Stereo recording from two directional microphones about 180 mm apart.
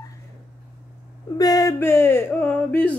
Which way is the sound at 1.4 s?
20° left (ahead or behind).